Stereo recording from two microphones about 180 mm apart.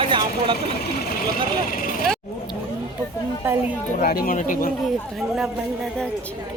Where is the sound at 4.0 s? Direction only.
50° left (ahead or behind).